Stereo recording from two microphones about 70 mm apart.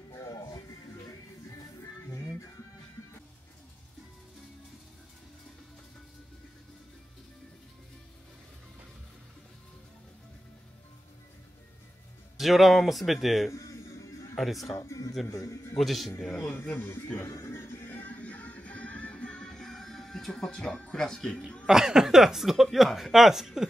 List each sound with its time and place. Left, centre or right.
12.4 s speech: centre
13.5 s a sound: left
14.3 s a man's voice: centre
14.7 s speech: left
15.7 s speech: centre
16.7 s speech: left
17.3 s a sound: left
17.9 s music: left
21.6 s speech: centre